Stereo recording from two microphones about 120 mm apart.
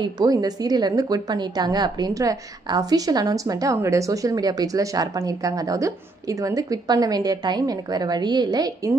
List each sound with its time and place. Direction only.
0.0 s a woman's voice: 30° right (ahead or behind)